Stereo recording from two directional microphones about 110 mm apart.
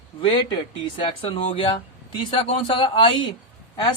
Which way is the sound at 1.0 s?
50° left (ahead or behind).